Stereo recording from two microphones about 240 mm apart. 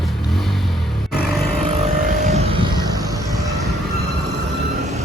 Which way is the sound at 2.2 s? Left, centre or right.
Right.